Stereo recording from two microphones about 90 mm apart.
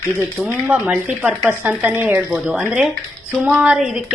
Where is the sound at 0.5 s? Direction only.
15° right (ahead or behind).